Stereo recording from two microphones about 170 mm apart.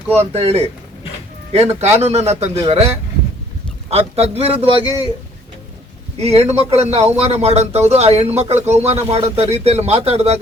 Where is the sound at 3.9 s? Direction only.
35° right (ahead or behind).